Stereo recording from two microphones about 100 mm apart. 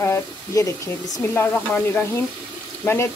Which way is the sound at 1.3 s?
20° left (ahead or behind).